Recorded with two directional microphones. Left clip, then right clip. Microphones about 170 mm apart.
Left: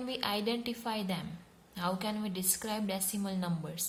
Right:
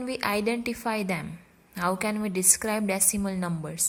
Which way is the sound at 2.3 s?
50° right (ahead or behind).